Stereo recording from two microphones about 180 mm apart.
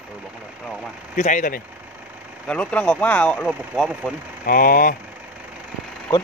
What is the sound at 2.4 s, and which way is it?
Speech, 5° left (ahead or behind).